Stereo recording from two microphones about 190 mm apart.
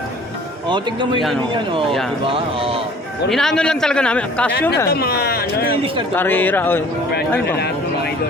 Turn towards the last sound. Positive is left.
turn(degrees=10)  # may be behind; listen again after turning